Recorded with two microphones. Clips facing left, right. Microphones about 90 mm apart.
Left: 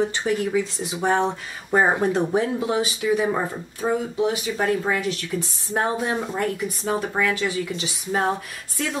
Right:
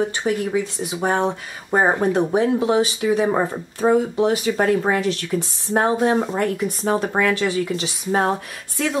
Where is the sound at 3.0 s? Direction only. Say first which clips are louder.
Even; 40° right (ahead or behind).